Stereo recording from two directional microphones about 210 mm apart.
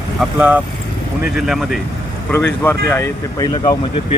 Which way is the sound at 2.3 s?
10° left (ahead or behind).